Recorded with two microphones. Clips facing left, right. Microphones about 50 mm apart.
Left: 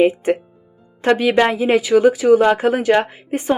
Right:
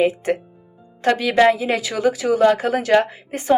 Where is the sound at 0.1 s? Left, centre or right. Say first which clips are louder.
Left 3 dB; left.